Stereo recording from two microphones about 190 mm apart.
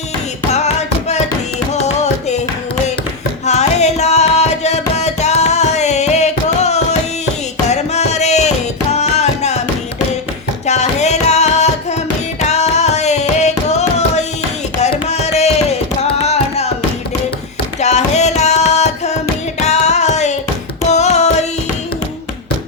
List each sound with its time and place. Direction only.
0.5 s music: 35° left (ahead or behind)
3.4 s music: 35° left (ahead or behind)
10.7 s music: 35° left (ahead or behind)
17.7 s music: 35° left (ahead or behind)